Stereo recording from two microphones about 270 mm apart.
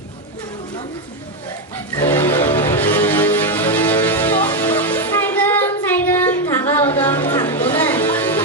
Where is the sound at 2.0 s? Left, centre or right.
Centre.